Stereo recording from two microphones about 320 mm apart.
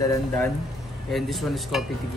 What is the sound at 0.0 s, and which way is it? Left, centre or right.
A man's voice, centre.